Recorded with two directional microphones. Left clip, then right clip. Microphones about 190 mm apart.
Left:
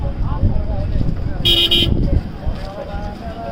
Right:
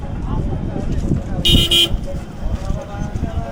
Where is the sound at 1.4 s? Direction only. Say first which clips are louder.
Even; 25° right (ahead or behind).